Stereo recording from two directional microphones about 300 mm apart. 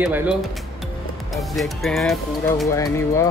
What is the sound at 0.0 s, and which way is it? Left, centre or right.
Speech, centre.